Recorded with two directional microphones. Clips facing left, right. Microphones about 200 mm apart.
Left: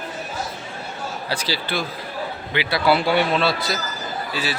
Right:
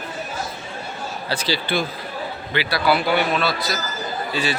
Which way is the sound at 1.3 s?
10° left (ahead or behind).